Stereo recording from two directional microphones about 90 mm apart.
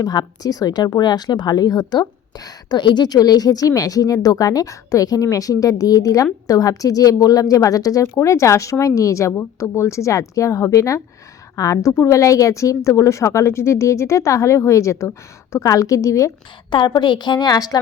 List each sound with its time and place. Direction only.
0.0 s speech: 45° left (ahead or behind)
16.6 s a woman's voice: 60° left (ahead or behind)